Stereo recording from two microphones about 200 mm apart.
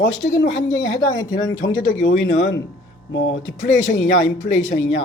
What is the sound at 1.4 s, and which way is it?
Speech, 75° left (ahead or behind).